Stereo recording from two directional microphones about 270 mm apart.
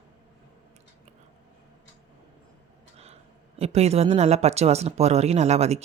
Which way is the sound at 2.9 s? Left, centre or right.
Right.